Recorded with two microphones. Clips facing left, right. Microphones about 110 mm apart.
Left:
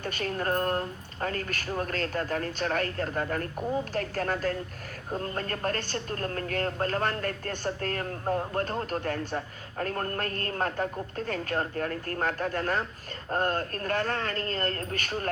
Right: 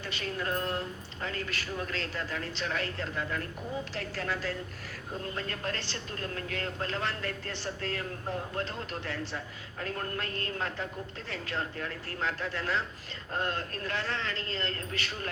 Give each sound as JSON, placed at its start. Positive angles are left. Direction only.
{"t": 0.0, "sound": "speech", "side_deg": 50}